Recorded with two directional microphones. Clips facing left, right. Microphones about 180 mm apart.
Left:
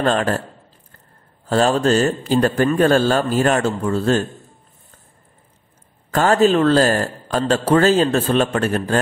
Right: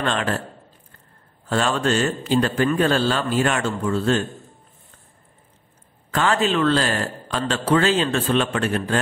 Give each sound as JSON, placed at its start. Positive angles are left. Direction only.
{"t": 0.0, "sound": "a man's voice", "side_deg": 40}
{"t": 1.5, "sound": "a man's voice", "side_deg": 35}
{"t": 6.1, "sound": "a man's voice", "side_deg": 45}